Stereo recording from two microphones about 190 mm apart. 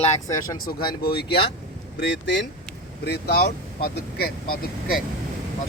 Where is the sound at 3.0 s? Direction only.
60° left (ahead or behind).